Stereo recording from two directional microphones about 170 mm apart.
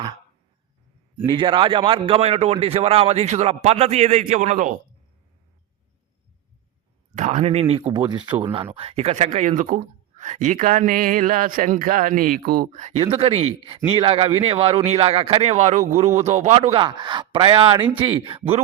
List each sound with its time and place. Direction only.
1.3 s speech: 30° right (ahead or behind); by 4.8 s 50° right (ahead or behind)
7.2 s a man's voice: 40° right (ahead or behind)
13.0 s speech: 35° right (ahead or behind)